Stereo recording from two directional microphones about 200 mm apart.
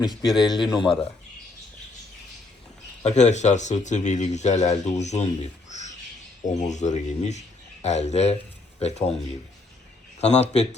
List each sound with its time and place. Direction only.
0.3 s a man's voice: 20° left (ahead or behind)
3.0 s speech: 35° left (ahead or behind)
10.2 s speech: 35° left (ahead or behind)